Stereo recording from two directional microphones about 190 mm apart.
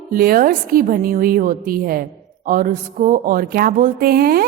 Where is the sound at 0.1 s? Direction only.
50° right (ahead or behind).